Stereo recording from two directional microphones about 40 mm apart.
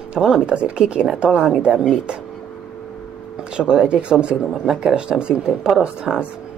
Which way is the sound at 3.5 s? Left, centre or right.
Right.